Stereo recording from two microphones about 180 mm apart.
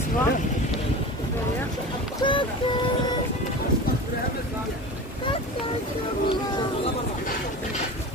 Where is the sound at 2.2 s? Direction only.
25° left (ahead or behind).